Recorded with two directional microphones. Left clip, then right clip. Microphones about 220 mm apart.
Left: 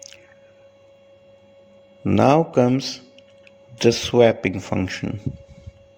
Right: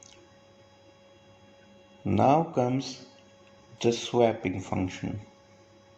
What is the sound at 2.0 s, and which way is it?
Speech, 50° left (ahead or behind).